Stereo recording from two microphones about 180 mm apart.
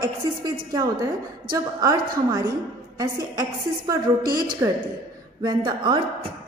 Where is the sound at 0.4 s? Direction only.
20° right (ahead or behind).